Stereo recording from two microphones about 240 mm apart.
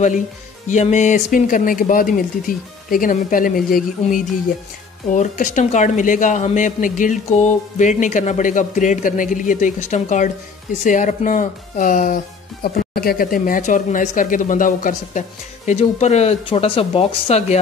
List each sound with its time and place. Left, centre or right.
0.7 s speech: left